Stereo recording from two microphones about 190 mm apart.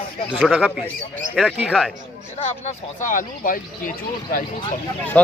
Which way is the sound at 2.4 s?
40° left (ahead or behind).